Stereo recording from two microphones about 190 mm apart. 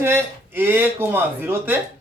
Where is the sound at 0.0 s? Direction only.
10° right (ahead or behind).